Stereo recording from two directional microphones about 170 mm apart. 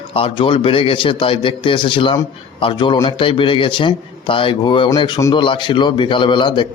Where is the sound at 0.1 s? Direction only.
30° left (ahead or behind).